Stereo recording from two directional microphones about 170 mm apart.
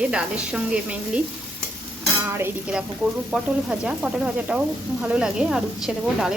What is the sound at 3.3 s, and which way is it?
Sizzle, 5° right (ahead or behind).